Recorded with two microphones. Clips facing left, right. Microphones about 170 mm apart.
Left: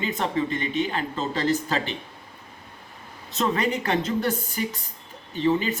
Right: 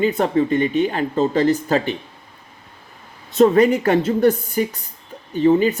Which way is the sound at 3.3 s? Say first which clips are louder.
Right 12 dB; 45° right (ahead or behind).